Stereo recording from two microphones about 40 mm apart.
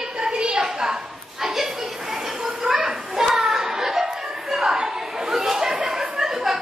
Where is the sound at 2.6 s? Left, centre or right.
Centre.